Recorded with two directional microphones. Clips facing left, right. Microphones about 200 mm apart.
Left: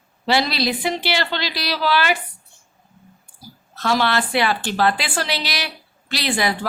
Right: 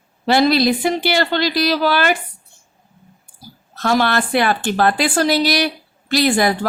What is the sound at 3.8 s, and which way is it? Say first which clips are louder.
A woman's voice: right 3 dB; 50° right (ahead or behind).